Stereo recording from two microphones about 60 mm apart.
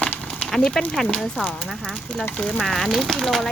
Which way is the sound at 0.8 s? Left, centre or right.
Centre.